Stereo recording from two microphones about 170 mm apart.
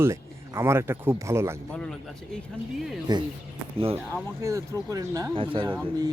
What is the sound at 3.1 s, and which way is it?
Speech, 25° right (ahead or behind).